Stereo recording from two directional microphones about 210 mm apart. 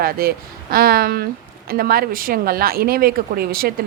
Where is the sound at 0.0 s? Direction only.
45° right (ahead or behind).